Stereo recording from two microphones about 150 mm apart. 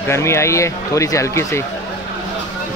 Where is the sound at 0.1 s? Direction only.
20° left (ahead or behind).